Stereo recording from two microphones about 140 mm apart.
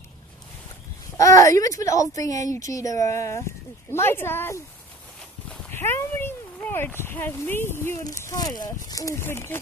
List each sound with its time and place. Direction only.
1.1 s speech: 25° left (ahead or behind)
5.7 s speech: 15° left (ahead or behind)